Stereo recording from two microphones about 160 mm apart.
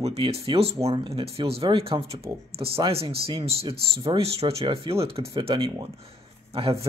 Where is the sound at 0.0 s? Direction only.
40° right (ahead or behind).